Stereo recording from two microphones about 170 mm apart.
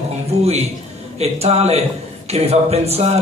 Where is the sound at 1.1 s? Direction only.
40° right (ahead or behind).